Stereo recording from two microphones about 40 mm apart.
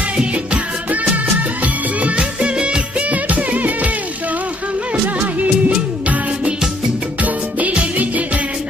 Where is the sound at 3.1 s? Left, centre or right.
Right.